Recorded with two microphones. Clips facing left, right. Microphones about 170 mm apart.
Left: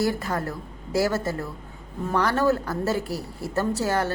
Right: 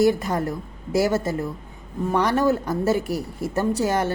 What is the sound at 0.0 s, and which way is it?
A woman's voice, 20° right (ahead or behind).